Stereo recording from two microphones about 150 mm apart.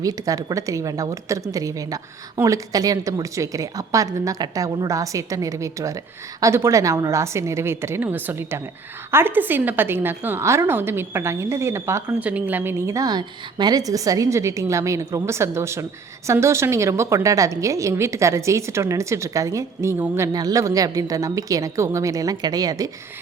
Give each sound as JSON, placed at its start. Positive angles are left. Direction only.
{"t": 0.0, "sound": "a woman's voice", "side_deg": -25}